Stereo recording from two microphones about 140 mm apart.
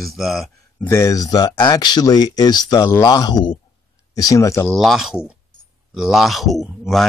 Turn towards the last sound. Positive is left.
turn(degrees=0)  # may be behind; listen again after turning